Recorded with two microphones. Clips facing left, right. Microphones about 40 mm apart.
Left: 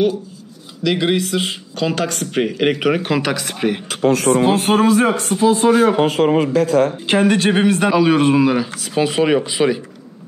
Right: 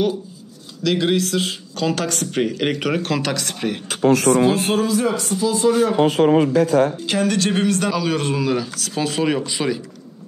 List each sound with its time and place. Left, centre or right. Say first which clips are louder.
0.8 s speech: left 1 dB; centre
4.3 s speech: left 2 dB; left
6.0 s speech: even; left
7.1 s speech: left 5 dB; left